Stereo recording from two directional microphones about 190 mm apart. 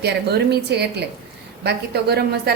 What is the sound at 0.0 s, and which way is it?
A woman's voice, 60° right (ahead or behind).